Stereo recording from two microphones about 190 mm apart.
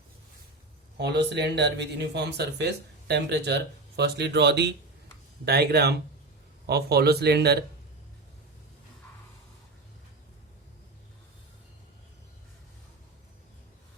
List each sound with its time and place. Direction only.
0.9 s speech: 60° right (ahead or behind)